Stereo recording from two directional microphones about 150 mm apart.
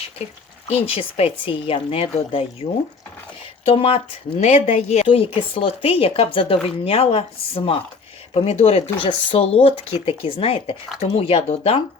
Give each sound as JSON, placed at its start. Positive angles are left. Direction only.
{"t": 0.7, "sound": "a woman's voice", "side_deg": 40}
{"t": 3.7, "sound": "a woman's voice", "side_deg": 40}